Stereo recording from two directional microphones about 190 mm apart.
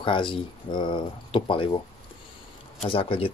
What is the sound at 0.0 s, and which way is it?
Speech, 25° left (ahead or behind).